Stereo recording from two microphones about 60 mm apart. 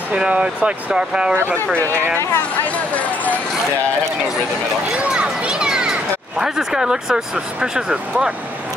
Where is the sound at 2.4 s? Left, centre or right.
Left.